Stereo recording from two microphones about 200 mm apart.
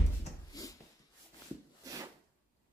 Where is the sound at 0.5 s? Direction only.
20° left (ahead or behind).